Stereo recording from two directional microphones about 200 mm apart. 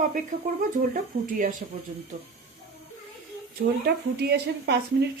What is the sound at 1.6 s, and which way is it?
Speech, 40° right (ahead or behind).